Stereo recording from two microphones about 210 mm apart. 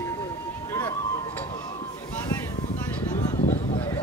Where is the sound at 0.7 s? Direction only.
15° left (ahead or behind).